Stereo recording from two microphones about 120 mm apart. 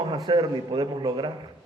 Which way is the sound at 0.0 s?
35° right (ahead or behind).